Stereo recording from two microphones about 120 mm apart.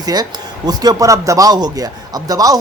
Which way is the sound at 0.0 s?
35° right (ahead or behind).